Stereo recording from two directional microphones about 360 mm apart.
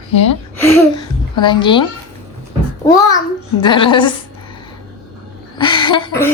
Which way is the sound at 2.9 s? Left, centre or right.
Centre.